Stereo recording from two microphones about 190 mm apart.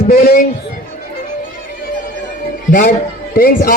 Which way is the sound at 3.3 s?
50° left (ahead or behind).